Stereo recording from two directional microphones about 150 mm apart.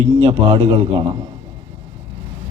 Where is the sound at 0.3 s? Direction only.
40° right (ahead or behind).